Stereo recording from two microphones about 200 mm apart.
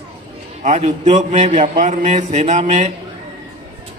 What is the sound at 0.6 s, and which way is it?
A man's voice, 35° right (ahead or behind).